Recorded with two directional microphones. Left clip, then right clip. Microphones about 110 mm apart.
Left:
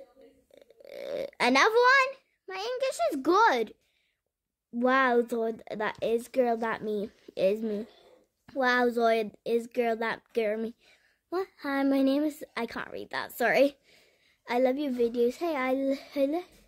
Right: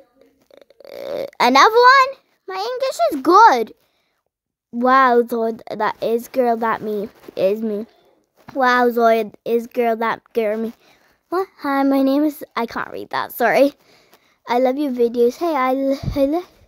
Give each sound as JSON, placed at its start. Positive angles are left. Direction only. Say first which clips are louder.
{"t": 0.6, "sound": "a child's voice", "louder": "right 9 dB", "side_deg": -40}
{"t": 4.7, "sound": "a woman's voice", "louder": "right 11 dB", "side_deg": -40}